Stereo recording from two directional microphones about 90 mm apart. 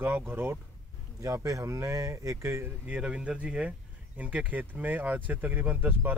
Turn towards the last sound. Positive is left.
turn(degrees=-20)  # may be behind; listen again after turning